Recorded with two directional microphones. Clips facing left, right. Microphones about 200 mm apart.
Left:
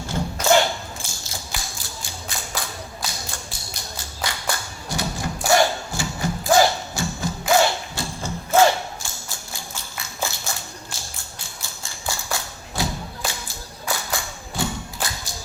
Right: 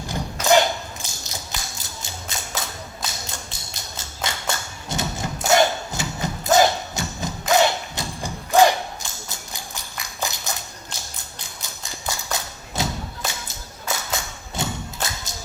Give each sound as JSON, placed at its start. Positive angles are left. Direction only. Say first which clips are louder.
{"t": 0.1, "sound": "thump", "louder": "even", "side_deg": -20}
{"t": 1.0, "sound": "tap", "louder": "even", "side_deg": -20}
{"t": 1.8, "sound": "music", "louder": "even", "side_deg": -20}
{"t": 11.2, "sound": "thump", "louder": "even", "side_deg": -20}